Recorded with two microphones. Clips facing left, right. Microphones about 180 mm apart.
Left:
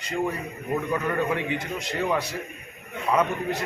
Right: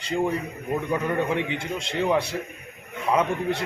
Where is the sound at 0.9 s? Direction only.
20° right (ahead or behind).